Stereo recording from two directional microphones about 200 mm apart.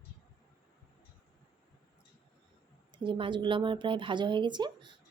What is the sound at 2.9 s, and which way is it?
Speech, 25° right (ahead or behind).